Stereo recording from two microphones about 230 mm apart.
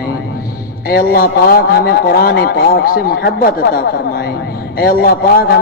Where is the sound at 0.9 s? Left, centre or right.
Left.